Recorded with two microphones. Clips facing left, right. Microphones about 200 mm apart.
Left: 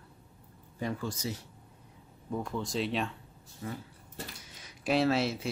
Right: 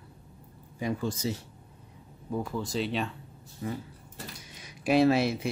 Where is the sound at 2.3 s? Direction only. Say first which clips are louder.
Right 2 dB; 5° right (ahead or behind).